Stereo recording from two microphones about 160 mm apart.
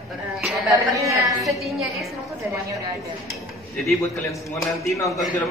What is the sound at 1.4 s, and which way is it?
Speech, centre (ahead or behind).